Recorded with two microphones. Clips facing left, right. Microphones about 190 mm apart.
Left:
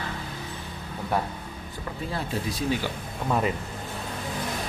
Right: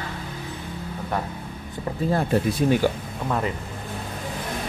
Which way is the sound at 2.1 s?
55° right (ahead or behind).